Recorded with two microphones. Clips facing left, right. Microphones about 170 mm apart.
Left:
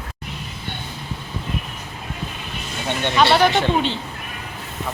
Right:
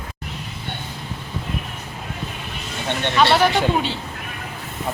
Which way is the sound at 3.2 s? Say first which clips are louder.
Left 1 dB; centre (ahead or behind).